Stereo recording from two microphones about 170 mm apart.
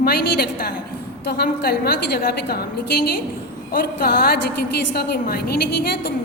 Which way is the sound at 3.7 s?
65° left (ahead or behind).